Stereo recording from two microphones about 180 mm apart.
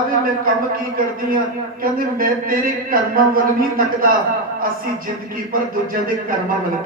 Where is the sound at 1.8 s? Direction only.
50° right (ahead or behind).